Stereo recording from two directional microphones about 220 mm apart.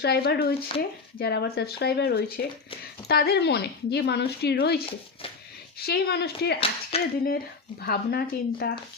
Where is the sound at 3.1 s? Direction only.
45° left (ahead or behind).